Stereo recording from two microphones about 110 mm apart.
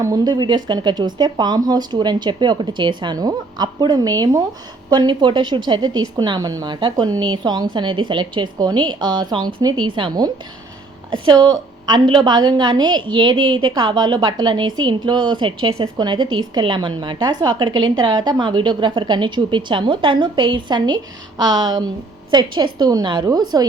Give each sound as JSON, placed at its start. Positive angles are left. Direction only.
{"t": 0.0, "sound": "a woman's voice", "side_deg": -35}
{"t": 6.7, "sound": "a woman's voice", "side_deg": -45}